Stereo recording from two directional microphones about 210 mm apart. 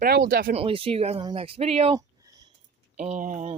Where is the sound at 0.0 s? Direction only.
45° right (ahead or behind).